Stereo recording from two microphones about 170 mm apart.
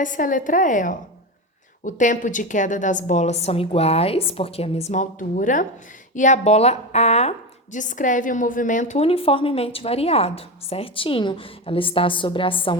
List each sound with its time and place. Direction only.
0.0 s a woman's voice: 50° left (ahead or behind); by 12.7 s 30° left (ahead or behind)